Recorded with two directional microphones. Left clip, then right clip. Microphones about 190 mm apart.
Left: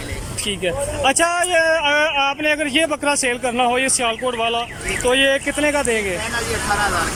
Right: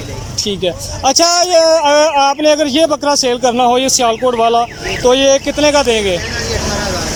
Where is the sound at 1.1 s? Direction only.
15° right (ahead or behind).